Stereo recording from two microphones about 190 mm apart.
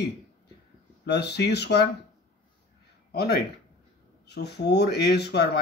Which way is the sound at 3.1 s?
55° left (ahead or behind).